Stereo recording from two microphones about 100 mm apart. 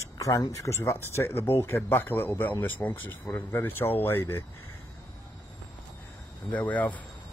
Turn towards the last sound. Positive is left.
turn(degrees=15)  # may be behind; listen again after turning